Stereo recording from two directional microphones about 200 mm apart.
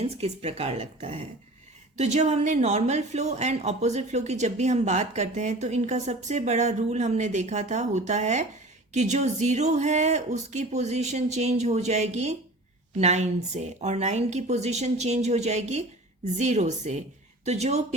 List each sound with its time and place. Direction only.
0.0 s a woman's voice: 30° right (ahead or behind)